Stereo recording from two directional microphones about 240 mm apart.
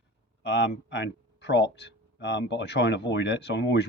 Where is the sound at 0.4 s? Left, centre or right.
Left.